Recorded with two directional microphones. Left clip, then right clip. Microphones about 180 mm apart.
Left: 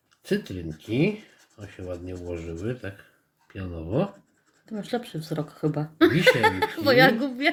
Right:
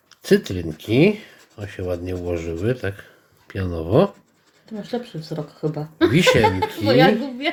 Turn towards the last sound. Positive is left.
turn(degrees=30)  # may be behind; listen again after turning